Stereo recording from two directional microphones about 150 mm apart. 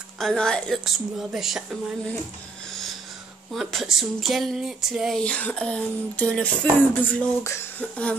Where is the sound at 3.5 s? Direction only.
Centre (ahead or behind).